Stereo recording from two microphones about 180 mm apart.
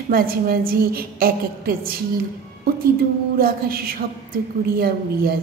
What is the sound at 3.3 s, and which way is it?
A woman's voice, 55° right (ahead or behind).